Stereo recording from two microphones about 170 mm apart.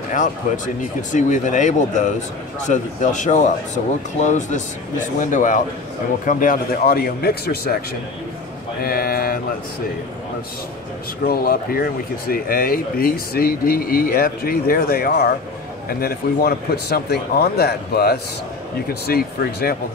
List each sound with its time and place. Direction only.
1.1 s speech: 45° left (ahead or behind); by 7.8 s 65° left (ahead or behind)
8.8 s speech: 60° left (ahead or behind)
11.2 s speech: 60° left (ahead or behind)